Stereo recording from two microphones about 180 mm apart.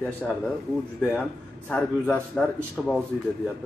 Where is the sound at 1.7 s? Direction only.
5° left (ahead or behind).